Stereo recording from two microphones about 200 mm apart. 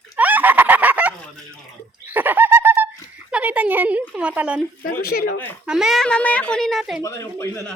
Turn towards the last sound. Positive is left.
turn(degrees=15)  # may be behind; listen again after turning